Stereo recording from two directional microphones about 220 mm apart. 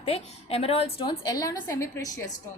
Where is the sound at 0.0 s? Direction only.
25° left (ahead or behind).